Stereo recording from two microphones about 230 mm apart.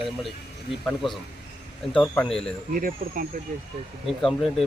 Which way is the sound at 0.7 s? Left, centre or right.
Centre.